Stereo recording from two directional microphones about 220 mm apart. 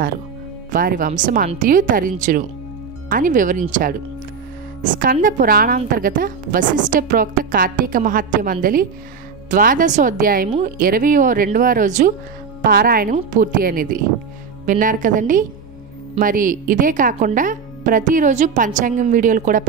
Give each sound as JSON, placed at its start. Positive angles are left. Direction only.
{"t": 0.7, "sound": "a woman's voice", "side_deg": -40}